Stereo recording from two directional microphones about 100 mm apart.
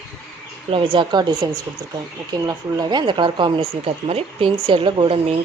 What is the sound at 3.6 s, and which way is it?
Speech, 75° right (ahead or behind).